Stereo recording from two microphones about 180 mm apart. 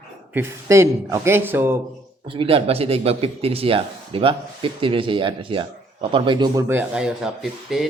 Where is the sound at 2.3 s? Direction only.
30° right (ahead or behind).